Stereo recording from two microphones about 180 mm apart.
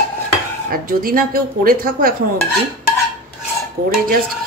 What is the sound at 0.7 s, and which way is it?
Speech, 50° right (ahead or behind).